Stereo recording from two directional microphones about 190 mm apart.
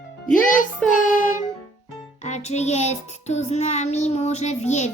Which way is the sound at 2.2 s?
35° left (ahead or behind).